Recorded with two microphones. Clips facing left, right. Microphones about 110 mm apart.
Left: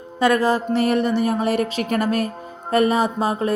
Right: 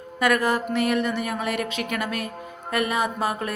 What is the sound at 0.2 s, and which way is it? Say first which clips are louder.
A woman's voice: left 4 dB; 30° left (ahead or behind).